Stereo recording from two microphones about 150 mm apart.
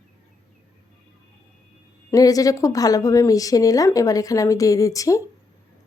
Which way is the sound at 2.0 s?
25° left (ahead or behind).